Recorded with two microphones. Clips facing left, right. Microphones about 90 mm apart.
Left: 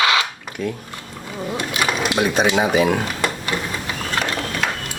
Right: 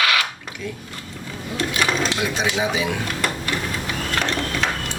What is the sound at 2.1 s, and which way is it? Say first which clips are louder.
Speech: left 5 dB; 50° left (ahead or behind).